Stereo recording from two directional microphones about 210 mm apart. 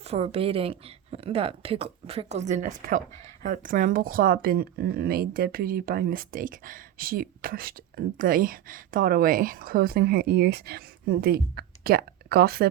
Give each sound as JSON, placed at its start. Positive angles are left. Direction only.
{"t": 0.0, "sound": "a woman's voice", "side_deg": -30}